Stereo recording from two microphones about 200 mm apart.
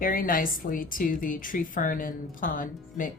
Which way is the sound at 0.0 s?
45° left (ahead or behind).